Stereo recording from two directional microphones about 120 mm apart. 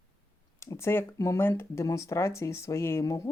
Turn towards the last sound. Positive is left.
turn(degrees=25)  # may be behind; listen again after turning